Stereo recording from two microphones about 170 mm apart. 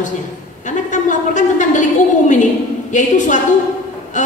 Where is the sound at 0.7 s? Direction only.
45° left (ahead or behind).